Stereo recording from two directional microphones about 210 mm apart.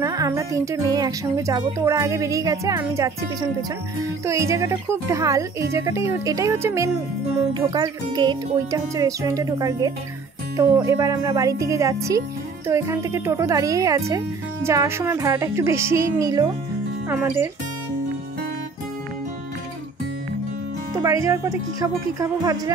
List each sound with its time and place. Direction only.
0.0 s speech: 15° right (ahead or behind)
4.3 s speech: 15° right (ahead or behind)
20.9 s speech: 15° right (ahead or behind)